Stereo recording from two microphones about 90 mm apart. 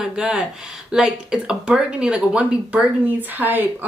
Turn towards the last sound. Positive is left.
turn(degrees=-20)  # may be behind; listen again after turning